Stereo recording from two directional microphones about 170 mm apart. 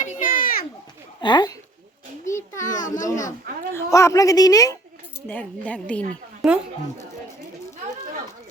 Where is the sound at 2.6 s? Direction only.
50° left (ahead or behind).